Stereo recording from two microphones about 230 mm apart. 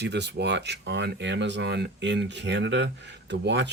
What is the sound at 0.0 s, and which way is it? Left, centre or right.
Speech, right.